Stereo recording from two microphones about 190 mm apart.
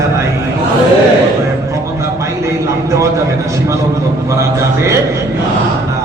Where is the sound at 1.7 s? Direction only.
15° right (ahead or behind).